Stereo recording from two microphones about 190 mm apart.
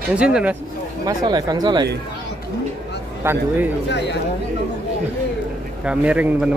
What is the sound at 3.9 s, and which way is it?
Speech, 65° left (ahead or behind).